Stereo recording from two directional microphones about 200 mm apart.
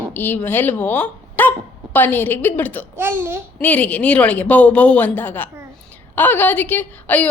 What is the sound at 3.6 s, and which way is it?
A woman's voice, 5° left (ahead or behind).